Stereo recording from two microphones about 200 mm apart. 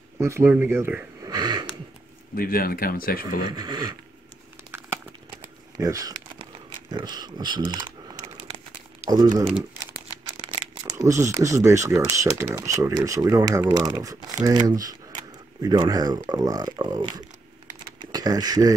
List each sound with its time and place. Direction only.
0.2 s speech: 15° right (ahead or behind)
1.3 s a sound: 20° right (ahead or behind)
2.3 s speech: 45° left (ahead or behind)
3.4 s speech: 20° right (ahead or behind)
5.8 s crumpling: 15° right (ahead or behind)
6.9 s speech: 20° right (ahead or behind)
9.1 s speech: 20° right (ahead or behind)
9.5 s crumpling: 5° right (ahead or behind)
10.4 s speech: 25° right (ahead or behind)